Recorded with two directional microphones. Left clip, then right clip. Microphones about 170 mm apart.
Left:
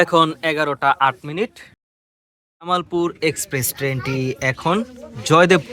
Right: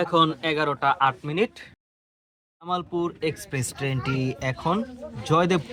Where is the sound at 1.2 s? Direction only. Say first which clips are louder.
Left 1 dB; centre (ahead or behind).